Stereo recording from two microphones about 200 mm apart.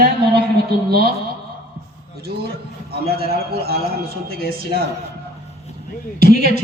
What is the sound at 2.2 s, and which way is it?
A man's voice, 50° right (ahead or behind).